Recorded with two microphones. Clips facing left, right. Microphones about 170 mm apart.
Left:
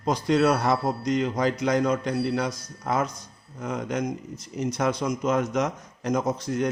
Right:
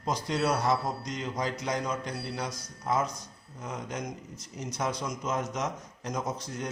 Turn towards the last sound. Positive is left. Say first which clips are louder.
# left 9 dB
turn(degrees=70)  # may be behind; listen again after turning